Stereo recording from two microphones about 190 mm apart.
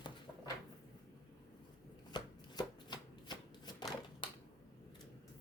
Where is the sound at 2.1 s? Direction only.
20° left (ahead or behind).